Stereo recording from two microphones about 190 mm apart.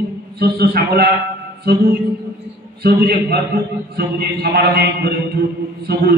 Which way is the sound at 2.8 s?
55° right (ahead or behind).